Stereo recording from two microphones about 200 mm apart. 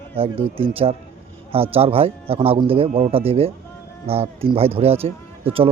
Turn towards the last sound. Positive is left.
turn(degrees=-30)  # may be behind; listen again after turning